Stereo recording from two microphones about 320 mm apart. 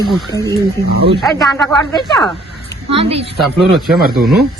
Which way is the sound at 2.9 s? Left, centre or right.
Centre.